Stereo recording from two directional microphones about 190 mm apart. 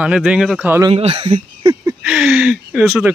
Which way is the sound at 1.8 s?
5° right (ahead or behind).